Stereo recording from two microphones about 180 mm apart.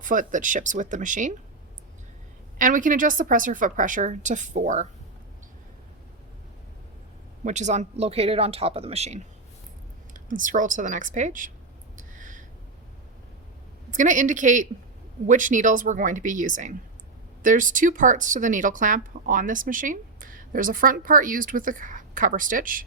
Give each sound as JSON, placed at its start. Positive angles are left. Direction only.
{"t": 0.0, "sound": "speech", "side_deg": -45}
{"t": 2.6, "sound": "speech", "side_deg": -45}
{"t": 7.4, "sound": "speech", "side_deg": -40}
{"t": 10.2, "sound": "speech", "side_deg": -45}
{"t": 11.9, "sound": "a sound", "side_deg": -45}
{"t": 13.9, "sound": "speech", "side_deg": -45}